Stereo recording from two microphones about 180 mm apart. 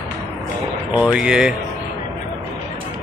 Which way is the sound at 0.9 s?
5° right (ahead or behind).